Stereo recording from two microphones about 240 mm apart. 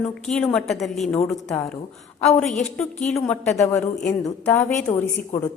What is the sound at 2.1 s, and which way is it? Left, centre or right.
Speech, left.